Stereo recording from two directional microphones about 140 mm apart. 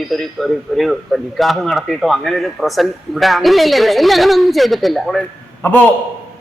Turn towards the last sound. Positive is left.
turn(degrees=15)  # may be behind; listen again after turning